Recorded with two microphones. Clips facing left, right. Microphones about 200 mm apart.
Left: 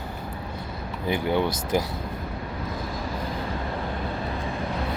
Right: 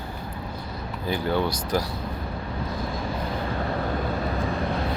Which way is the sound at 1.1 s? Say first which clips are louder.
Left 1 dB; 20° left (ahead or behind).